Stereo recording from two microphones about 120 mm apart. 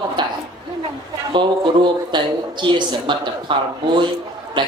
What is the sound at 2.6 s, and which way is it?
Speech, 40° right (ahead or behind).